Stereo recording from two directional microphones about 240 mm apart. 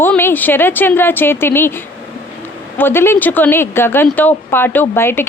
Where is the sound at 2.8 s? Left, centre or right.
Centre.